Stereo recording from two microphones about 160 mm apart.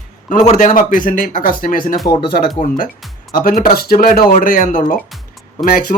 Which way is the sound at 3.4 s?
65° left (ahead or behind).